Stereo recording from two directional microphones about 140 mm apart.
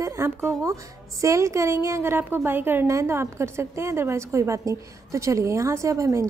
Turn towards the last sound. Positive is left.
turn(degrees=-20)  # may be behind; listen again after turning